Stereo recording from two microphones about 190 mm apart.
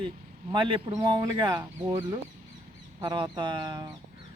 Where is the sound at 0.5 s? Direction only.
25° right (ahead or behind).